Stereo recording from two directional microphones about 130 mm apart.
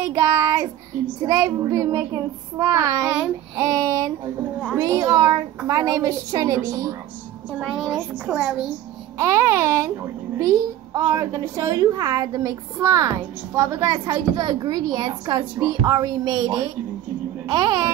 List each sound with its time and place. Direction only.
0.0 s child singing: 25° right (ahead or behind)
1.2 s a woman's voice: 30° right (ahead or behind)
7.5 s a child's voice: centre (ahead or behind)
9.2 s a woman's voice: 25° right (ahead or behind)